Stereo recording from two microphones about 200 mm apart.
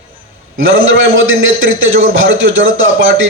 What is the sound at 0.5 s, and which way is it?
A man's voice, 80° right.